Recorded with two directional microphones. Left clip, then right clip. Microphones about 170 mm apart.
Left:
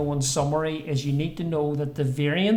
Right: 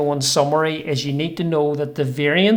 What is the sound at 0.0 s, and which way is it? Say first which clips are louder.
Speech: right 8 dB; 20° right (ahead or behind).